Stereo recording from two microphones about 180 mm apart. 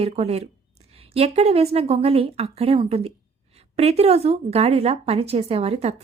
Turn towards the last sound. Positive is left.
turn(degrees=-35)  # may be behind; listen again after turning